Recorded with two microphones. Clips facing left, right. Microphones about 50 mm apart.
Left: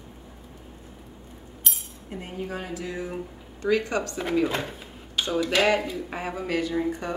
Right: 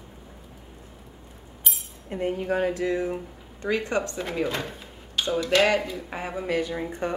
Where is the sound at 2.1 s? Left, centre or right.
Right.